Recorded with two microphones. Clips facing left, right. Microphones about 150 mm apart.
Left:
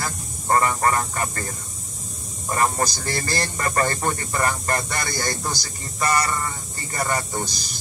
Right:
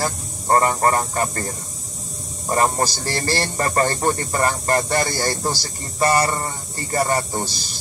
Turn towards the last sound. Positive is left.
turn(degrees=-30)  # may be behind; listen again after turning